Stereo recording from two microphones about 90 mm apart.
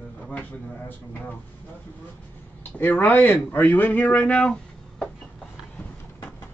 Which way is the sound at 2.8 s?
20° left (ahead or behind).